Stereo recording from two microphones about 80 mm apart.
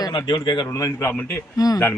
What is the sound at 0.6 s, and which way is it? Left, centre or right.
Speech, left.